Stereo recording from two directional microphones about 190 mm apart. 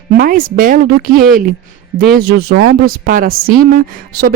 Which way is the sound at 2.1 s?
55° right (ahead or behind).